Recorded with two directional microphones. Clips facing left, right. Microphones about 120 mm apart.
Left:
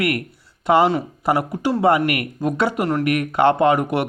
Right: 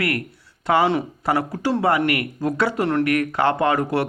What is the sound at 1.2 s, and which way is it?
Speech, 15° left (ahead or behind).